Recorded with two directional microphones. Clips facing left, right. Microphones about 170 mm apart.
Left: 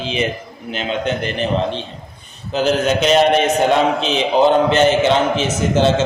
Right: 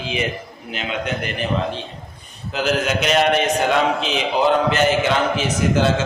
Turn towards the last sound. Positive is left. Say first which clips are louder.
# left 3 dB
turn(degrees=25)  # may be behind; listen again after turning